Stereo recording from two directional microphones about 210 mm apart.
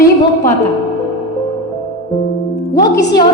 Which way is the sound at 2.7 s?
20° left (ahead or behind).